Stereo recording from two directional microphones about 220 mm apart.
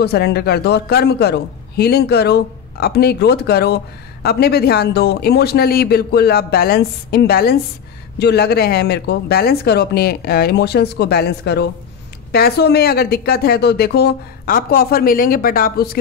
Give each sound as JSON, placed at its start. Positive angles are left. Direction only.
{"t": 0.0, "sound": "a man's voice", "side_deg": 45}